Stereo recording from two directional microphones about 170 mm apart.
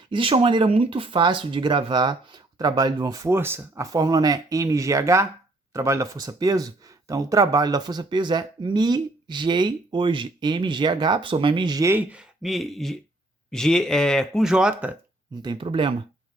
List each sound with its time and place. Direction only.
0.1 s speech: 30° right (ahead or behind); by 14.9 s 5° right (ahead or behind)
15.4 s speech: 25° right (ahead or behind)